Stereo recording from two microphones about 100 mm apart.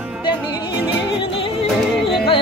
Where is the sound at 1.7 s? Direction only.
Centre (ahead or behind).